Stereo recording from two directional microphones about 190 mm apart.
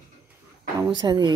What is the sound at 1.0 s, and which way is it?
Speech, 20° right (ahead or behind).